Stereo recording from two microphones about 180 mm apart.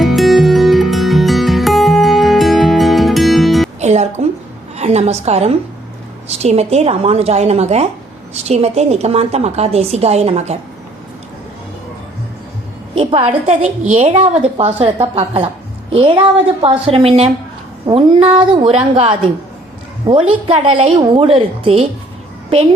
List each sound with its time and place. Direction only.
0.0 s music: centre (ahead or behind)
3.8 s music: 40° right (ahead or behind)
4.8 s a woman's voice: 35° right (ahead or behind)
13.0 s a woman's voice: 30° right (ahead or behind)